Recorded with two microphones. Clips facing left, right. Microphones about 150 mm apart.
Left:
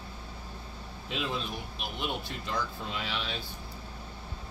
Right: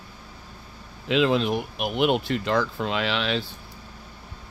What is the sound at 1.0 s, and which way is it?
Speech, 90° right.